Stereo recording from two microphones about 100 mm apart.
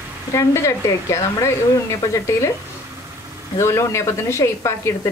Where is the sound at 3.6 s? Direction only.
30° left (ahead or behind).